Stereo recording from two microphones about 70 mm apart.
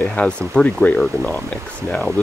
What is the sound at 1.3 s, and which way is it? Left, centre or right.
Speech, centre.